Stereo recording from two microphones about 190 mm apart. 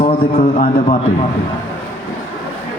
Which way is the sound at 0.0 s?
30° left (ahead or behind).